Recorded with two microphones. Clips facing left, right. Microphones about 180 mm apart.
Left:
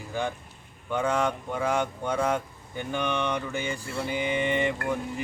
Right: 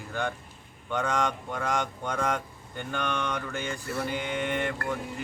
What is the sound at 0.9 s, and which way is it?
Speech, 10° left (ahead or behind).